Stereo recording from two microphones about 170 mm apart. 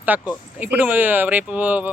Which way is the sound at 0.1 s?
10° right (ahead or behind).